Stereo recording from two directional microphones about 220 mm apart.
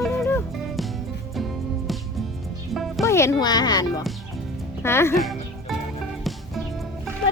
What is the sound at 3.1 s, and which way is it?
Speech, 10° left (ahead or behind).